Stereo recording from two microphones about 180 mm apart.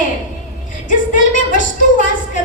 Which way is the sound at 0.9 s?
45° left (ahead or behind).